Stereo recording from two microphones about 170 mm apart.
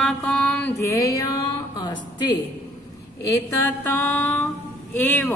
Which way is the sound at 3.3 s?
15° left (ahead or behind).